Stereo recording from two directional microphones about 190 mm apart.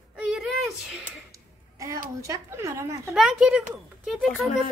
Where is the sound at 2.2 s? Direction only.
15° right (ahead or behind).